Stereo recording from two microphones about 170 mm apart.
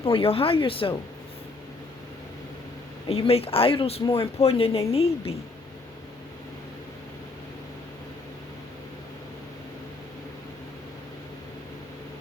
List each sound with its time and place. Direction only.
0.0 s speech: 35° left (ahead or behind)
3.1 s speech: 35° left (ahead or behind)